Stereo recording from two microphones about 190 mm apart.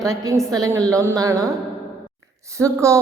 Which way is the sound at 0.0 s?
15° right (ahead or behind).